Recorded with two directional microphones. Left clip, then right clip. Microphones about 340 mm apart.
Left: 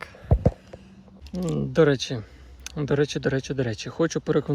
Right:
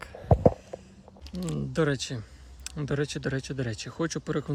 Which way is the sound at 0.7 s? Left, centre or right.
Left.